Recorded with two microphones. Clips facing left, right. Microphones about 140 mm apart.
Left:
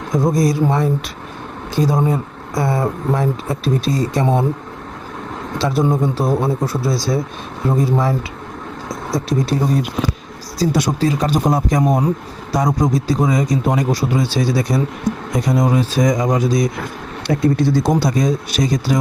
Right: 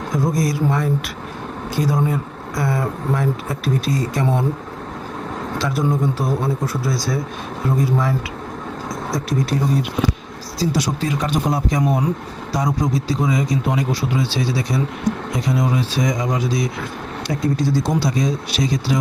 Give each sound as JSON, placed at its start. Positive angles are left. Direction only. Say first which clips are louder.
{"t": 0.1, "sound": "speech", "louder": "left 5 dB", "side_deg": 25}
{"t": 5.5, "sound": "speech", "louder": "left 4 dB", "side_deg": 25}
{"t": 9.1, "sound": "speech", "louder": "left 4 dB", "side_deg": 25}
{"t": 10.6, "sound": "a man's voice", "louder": "left 3 dB", "side_deg": 50}
{"t": 11.0, "sound": "a man's voice", "louder": "left 4 dB", "side_deg": 35}
{"t": 17.2, "sound": "a man's voice", "louder": "left 5 dB", "side_deg": 60}